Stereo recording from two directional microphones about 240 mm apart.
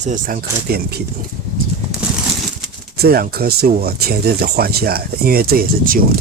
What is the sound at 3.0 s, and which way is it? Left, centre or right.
Speech, right.